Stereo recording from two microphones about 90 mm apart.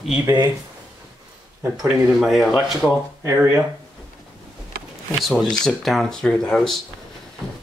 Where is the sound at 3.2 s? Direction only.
30° right (ahead or behind).